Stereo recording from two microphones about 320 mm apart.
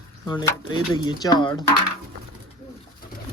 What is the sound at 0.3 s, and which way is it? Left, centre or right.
Speech, centre.